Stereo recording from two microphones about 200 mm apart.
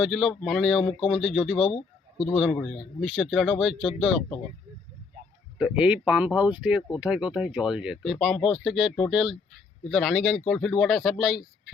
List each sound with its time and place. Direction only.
0.0 s speech: centre (ahead or behind)
1.5 s speech: 25° left (ahead or behind)
2.3 s speech: centre (ahead or behind)
5.5 s speech: 5° right (ahead or behind)